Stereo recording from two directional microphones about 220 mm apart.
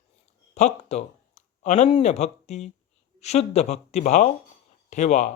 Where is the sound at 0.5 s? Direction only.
30° left (ahead or behind).